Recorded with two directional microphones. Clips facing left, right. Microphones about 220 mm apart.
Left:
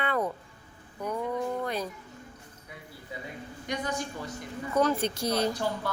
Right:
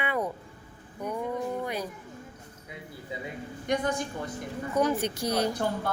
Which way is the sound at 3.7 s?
50° right (ahead or behind).